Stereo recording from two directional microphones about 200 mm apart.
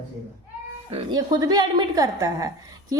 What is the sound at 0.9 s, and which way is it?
A woman's voice, 25° right (ahead or behind).